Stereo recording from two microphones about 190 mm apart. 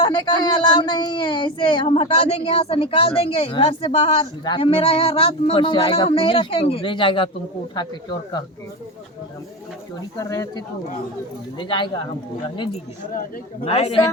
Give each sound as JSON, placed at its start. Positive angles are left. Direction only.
{"t": 0.0, "sound": "speech", "side_deg": 20}
{"t": 10.2, "sound": "speech", "side_deg": 15}
{"t": 13.7, "sound": "a woman's voice", "side_deg": 35}